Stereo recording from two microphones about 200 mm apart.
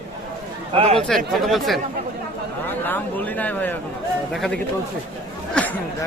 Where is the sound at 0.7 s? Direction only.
30° right (ahead or behind).